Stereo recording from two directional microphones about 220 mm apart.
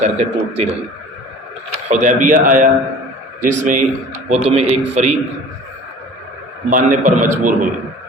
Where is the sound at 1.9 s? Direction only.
35° right (ahead or behind).